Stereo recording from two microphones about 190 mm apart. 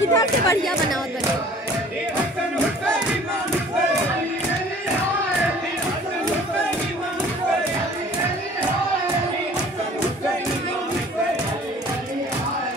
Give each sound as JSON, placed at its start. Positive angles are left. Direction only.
{"t": 0.1, "sound": "speech", "side_deg": 15}